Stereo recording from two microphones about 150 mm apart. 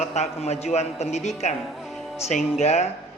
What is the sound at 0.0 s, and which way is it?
A man's voice, 45° left (ahead or behind).